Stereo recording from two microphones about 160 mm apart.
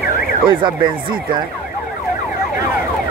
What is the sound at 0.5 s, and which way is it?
Speech, 30° right (ahead or behind).